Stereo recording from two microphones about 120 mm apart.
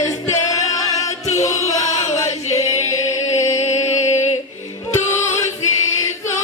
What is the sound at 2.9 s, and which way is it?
Chant, 25° left (ahead or behind).